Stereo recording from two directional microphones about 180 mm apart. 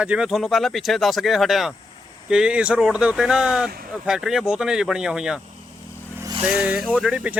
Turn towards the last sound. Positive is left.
turn(degrees=-5)  # may be behind; listen again after turning